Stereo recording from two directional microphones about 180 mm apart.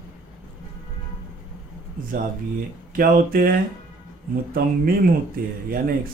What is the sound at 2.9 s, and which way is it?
A man's voice, 50° right (ahead or behind).